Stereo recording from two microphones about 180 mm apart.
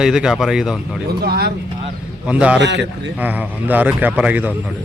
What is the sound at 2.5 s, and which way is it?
Speech, 75° right (ahead or behind).